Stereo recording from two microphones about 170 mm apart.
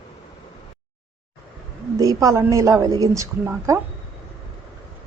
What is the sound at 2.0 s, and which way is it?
Speech, 20° right (ahead or behind).